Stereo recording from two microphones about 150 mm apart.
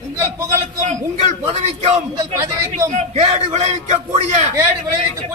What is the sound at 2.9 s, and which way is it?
A man's voice, 50° right (ahead or behind).